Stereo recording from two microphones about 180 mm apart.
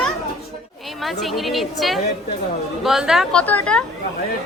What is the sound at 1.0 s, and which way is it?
A woman's voice, centre (ahead or behind).